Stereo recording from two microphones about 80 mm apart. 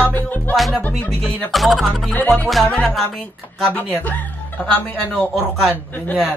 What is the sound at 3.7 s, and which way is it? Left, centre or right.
Speech, left.